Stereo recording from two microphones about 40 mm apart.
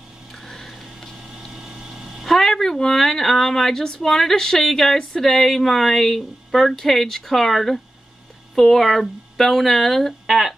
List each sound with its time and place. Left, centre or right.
0.3 s a sound: centre
1.5 s vehicle: centre
2.2 s speech: centre